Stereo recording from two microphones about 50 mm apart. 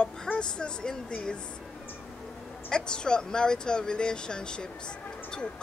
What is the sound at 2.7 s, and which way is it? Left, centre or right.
Speech, centre.